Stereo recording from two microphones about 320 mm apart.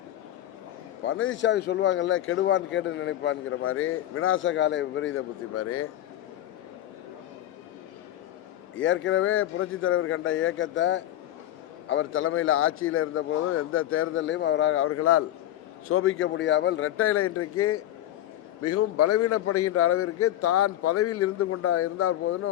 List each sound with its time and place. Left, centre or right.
1.0 s speech: left
8.8 s a man's voice: left